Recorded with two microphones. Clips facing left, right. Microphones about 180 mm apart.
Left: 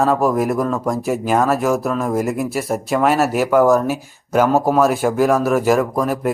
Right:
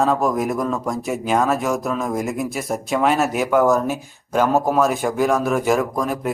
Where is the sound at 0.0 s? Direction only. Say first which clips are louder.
Left 3 dB; centre (ahead or behind).